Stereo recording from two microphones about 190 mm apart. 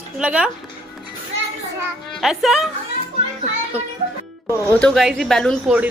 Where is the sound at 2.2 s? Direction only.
Centre (ahead or behind).